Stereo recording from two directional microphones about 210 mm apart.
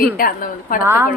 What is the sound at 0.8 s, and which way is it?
Speech, 10° right (ahead or behind).